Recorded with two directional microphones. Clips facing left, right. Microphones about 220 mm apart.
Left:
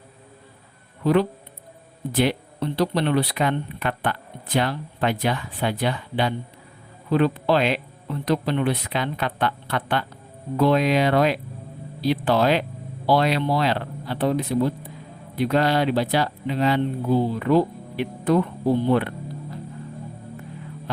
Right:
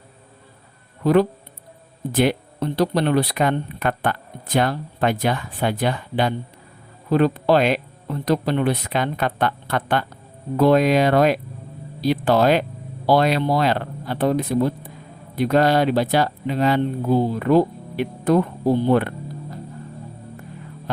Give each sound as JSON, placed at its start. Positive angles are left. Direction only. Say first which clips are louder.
{"t": 1.0, "sound": "speech", "louder": "right 3 dB", "side_deg": -45}
{"t": 18.9, "sound": "music", "louder": "right 2 dB", "side_deg": -45}